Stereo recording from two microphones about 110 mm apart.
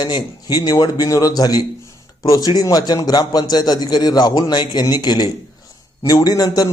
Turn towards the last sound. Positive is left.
turn(degrees=35)  # may be behind; listen again after turning